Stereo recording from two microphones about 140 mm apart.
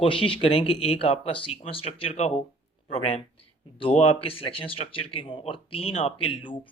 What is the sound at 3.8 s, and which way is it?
Speech, 40° left (ahead or behind).